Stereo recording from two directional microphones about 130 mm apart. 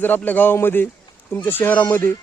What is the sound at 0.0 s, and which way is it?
Speech, 15° left (ahead or behind).